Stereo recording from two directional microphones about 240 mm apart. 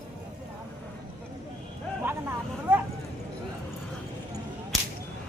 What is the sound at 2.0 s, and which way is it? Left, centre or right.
Vehicle, centre.